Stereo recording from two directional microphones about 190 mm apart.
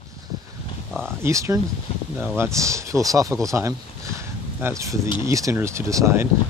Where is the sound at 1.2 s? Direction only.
15° right (ahead or behind).